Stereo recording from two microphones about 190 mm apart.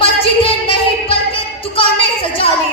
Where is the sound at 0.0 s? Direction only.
30° left (ahead or behind).